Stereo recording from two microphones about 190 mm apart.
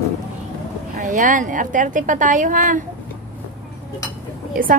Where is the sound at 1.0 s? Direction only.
40° right (ahead or behind).